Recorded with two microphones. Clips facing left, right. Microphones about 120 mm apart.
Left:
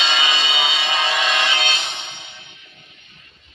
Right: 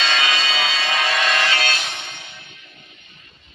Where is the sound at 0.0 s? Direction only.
25° left (ahead or behind).